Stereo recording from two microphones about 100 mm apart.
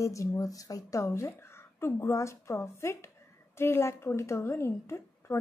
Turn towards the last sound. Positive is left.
turn(degrees=25)  # may be behind; listen again after turning